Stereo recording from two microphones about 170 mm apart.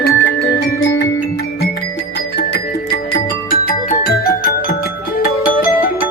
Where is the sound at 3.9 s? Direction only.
60° left (ahead or behind).